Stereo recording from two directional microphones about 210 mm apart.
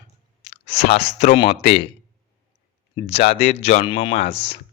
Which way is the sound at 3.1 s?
30° left (ahead or behind).